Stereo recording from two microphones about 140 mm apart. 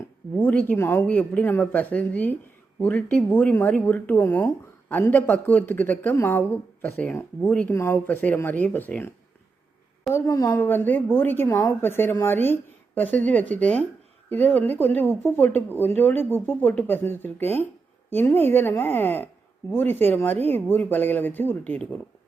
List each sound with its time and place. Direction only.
0.3 s speech: 10° left (ahead or behind)
10.1 s a woman's voice: 20° left (ahead or behind)
10.5 s speech: 15° left (ahead or behind)